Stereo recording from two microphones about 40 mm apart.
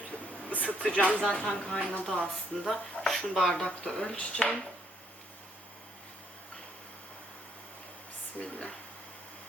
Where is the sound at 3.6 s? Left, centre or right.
Left.